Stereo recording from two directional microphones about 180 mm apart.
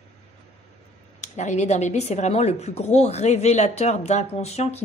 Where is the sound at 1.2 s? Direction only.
40° left (ahead or behind).